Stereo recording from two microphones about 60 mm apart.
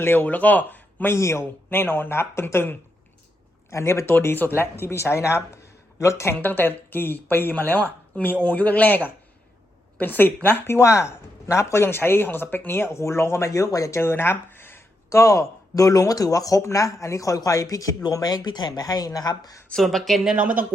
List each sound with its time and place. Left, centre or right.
0.0 s speech: left
1.1 s speech: left
1.7 s speech: left
3.7 s speech: left
4.1 s speech: left
6.4 s speech: left
10.0 s speech: left
10.8 s speech: left
13.9 s speech: left
15.1 s speech: left
19.7 s speech: centre
20.4 s speech: right